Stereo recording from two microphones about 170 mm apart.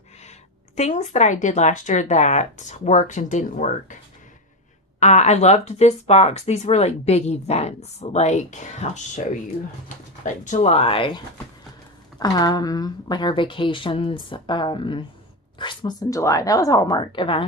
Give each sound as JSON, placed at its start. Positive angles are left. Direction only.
{"t": 0.8, "sound": "speech", "side_deg": 45}
{"t": 4.9, "sound": "speech", "side_deg": 45}
{"t": 10.2, "sound": "speech", "side_deg": 45}
{"t": 12.2, "sound": "speech", "side_deg": 25}